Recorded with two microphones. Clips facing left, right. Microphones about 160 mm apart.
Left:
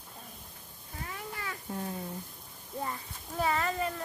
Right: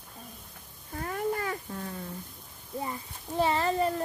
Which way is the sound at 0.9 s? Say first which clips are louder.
Right 11 dB; 50° right (ahead or behind).